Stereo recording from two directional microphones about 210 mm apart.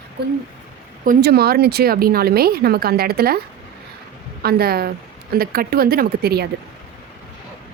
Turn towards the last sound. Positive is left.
turn(degrees=-50)  # may be behind; listen again after turning